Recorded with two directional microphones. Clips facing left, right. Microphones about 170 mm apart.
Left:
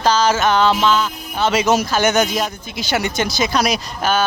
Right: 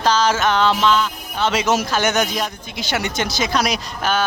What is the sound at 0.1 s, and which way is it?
Music, 5° left (ahead or behind).